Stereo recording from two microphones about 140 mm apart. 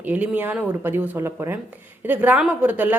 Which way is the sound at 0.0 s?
10° right (ahead or behind).